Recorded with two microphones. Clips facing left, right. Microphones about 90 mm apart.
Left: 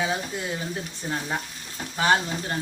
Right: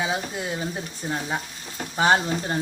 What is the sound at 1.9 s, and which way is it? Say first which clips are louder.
Frying: right 2 dB; 25° right (ahead or behind).